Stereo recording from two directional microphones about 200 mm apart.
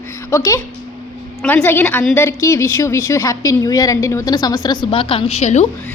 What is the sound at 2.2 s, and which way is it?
Speech, 15° left (ahead or behind).